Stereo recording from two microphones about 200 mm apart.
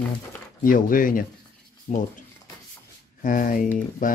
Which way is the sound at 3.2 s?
40° left (ahead or behind).